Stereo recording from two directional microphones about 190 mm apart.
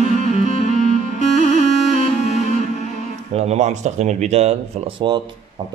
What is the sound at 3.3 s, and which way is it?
Speech, 35° right (ahead or behind).